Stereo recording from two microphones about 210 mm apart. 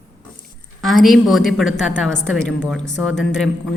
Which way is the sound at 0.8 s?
Centre (ahead or behind).